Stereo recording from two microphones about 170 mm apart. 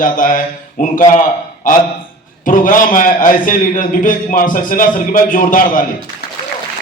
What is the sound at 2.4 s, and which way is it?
A man's voice, 50° left (ahead or behind).